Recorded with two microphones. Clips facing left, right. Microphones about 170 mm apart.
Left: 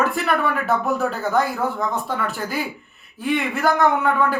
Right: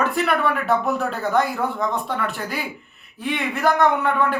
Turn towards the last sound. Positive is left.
turn(degrees=0)  # may be behind; listen again after turning